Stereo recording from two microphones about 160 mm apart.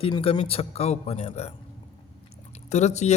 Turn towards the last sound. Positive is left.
turn(degrees=45)  # may be behind; listen again after turning